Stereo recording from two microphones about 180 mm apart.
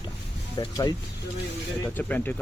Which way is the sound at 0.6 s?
20° left (ahead or behind).